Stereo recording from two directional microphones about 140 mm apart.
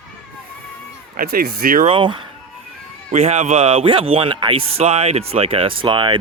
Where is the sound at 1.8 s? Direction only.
35° right (ahead or behind).